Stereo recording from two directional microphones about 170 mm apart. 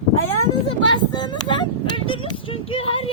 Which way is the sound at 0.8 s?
25° left (ahead or behind).